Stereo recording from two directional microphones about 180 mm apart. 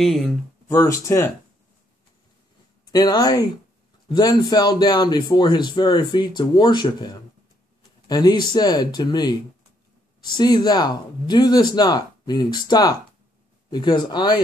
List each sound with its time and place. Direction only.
0.0 s speech: centre (ahead or behind)
0.7 s speech: 15° left (ahead or behind)
2.9 s a man's voice: 20° left (ahead or behind)